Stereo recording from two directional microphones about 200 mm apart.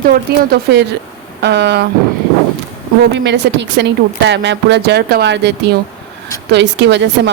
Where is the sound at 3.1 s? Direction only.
60° right (ahead or behind).